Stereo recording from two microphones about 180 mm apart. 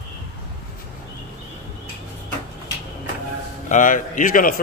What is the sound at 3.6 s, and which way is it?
Speech, 45° left (ahead or behind).